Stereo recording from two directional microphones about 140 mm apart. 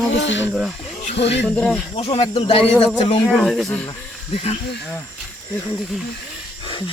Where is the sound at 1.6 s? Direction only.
Centre (ahead or behind).